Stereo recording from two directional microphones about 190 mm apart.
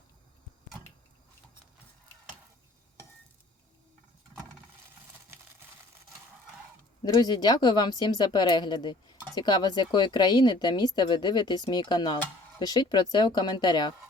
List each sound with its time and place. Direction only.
7.0 s speech: 20° left (ahead or behind)